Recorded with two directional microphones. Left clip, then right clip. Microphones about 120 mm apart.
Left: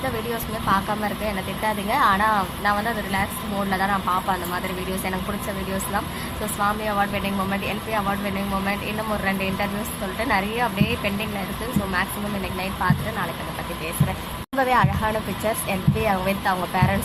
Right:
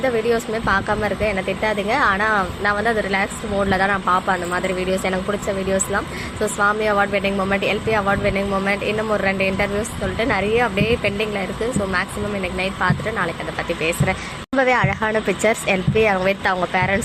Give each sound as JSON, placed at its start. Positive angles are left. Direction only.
{"t": 0.7, "sound": "speech", "side_deg": -35}
{"t": 6.7, "sound": "speech", "side_deg": -35}
{"t": 10.2, "sound": "speech", "side_deg": -25}
{"t": 12.5, "sound": "speech", "side_deg": -30}
{"t": 14.5, "sound": "speech", "side_deg": -35}